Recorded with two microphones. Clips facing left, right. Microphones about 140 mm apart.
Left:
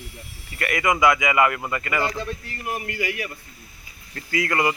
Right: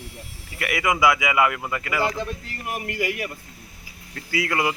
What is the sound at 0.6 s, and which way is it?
Speech, 10° right (ahead or behind).